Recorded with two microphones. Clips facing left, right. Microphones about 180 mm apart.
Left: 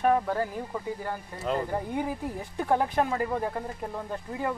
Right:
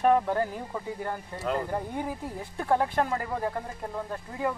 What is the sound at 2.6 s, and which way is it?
Speech, 15° left (ahead or behind).